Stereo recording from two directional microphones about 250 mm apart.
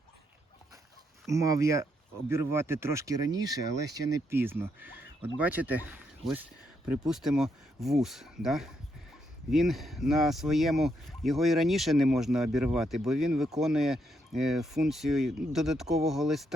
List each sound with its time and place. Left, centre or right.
1.3 s speech: centre